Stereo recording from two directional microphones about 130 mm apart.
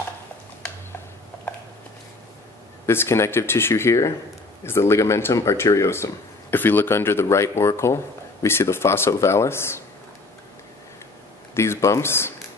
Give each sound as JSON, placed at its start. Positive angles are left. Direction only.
{"t": 2.9, "sound": "speech", "side_deg": 20}
{"t": 11.5, "sound": "speech", "side_deg": 20}